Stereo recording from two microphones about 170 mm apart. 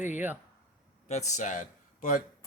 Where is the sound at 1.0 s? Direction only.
40° left (ahead or behind).